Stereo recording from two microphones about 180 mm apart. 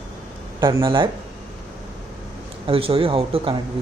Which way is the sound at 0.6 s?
25° right (ahead or behind).